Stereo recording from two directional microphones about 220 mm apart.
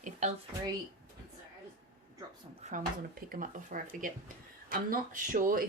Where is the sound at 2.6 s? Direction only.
35° right (ahead or behind).